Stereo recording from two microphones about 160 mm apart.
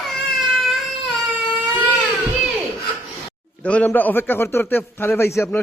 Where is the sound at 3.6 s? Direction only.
10° left (ahead or behind).